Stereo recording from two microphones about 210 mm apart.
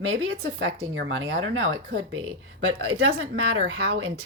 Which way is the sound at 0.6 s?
60° right (ahead or behind).